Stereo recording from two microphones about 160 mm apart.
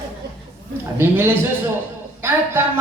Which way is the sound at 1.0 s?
15° right (ahead or behind).